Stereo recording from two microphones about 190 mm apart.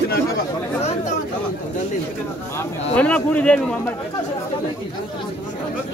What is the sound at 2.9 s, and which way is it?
A man's voice, 5° left (ahead or behind).